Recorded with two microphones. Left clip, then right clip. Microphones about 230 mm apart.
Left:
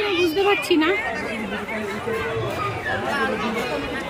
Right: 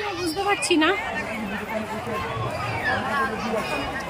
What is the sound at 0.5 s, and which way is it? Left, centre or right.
Speech, centre.